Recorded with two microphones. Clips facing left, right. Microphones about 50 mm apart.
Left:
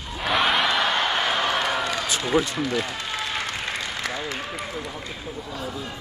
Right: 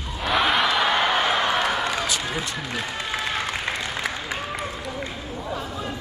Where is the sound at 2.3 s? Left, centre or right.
Left.